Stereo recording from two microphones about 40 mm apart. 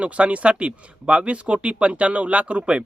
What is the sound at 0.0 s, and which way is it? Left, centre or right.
Speech, right.